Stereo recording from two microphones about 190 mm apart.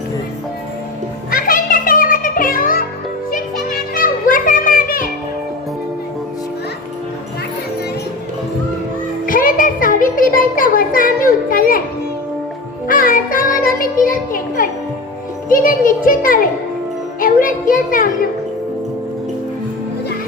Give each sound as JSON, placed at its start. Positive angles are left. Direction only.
{"t": 1.3, "sound": "music", "side_deg": 50}
{"t": 9.2, "sound": "a sound", "side_deg": 45}
{"t": 12.9, "sound": "music", "side_deg": 45}
{"t": 15.4, "sound": "a child's voice", "side_deg": 45}
{"t": 17.2, "sound": "music", "side_deg": 45}